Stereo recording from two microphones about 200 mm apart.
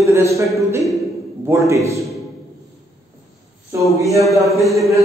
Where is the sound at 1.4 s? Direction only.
15° right (ahead or behind).